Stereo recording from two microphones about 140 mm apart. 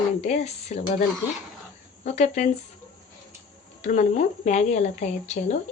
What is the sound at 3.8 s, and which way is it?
Speech, 55° left (ahead or behind).